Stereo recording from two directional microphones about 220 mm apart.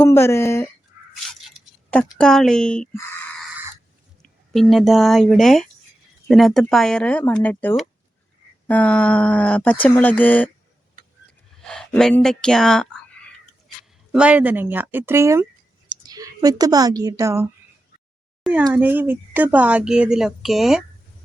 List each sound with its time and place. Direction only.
0.0 s speech: 10° left (ahead or behind)
1.0 s a sound: 5° right (ahead or behind)
1.4 s speech: centre (ahead or behind)
4.2 s speech: centre (ahead or behind)
11.3 s a sound: 5° left (ahead or behind)
14.1 s a woman's voice: 5° right (ahead or behind)
18.7 s speech: 10° right (ahead or behind)